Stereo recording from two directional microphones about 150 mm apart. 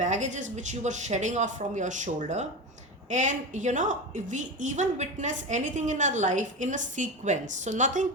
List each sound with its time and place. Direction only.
0.0 s a woman's voice: 55° right (ahead or behind)